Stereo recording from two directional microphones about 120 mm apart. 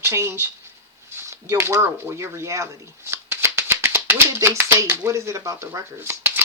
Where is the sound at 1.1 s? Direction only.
20° right (ahead or behind).